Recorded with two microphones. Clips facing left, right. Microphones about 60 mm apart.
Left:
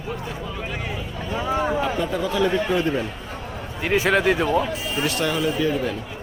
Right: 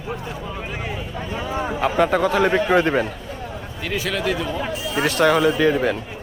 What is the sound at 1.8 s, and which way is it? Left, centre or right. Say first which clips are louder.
A man's voice: right 5 dB; right.